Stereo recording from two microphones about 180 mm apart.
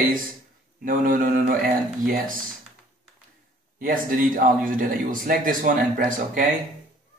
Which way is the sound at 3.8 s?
50° right (ahead or behind).